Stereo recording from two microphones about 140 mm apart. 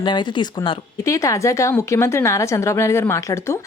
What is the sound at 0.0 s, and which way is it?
Speech, 35° left (ahead or behind).